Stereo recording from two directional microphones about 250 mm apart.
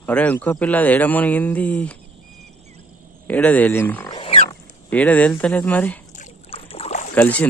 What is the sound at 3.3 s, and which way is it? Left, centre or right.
Speech, centre.